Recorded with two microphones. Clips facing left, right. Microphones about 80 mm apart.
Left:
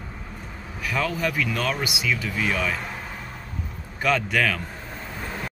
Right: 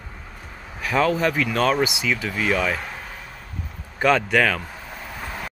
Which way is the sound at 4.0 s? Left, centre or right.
Right.